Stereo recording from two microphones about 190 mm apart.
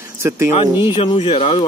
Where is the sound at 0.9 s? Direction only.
25° left (ahead or behind).